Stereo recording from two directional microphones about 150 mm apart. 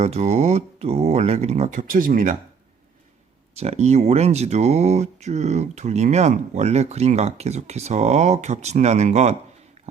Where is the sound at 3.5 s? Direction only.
45° right (ahead or behind).